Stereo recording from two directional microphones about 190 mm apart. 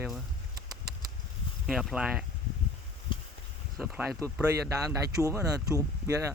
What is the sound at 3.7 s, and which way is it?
Speech, 5° right (ahead or behind).